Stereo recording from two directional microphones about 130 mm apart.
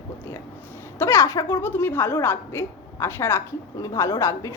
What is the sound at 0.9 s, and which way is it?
A woman's voice, 20° left (ahead or behind).